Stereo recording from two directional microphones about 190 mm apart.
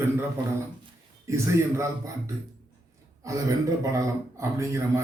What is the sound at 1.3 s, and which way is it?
Speech, 15° right (ahead or behind).